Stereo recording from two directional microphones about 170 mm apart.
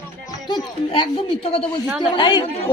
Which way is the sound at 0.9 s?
35° left (ahead or behind).